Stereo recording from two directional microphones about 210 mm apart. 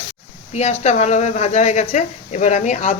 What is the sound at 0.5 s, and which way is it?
A woman's voice, 30° left (ahead or behind).